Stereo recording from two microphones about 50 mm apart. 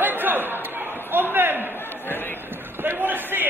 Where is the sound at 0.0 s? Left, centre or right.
Right.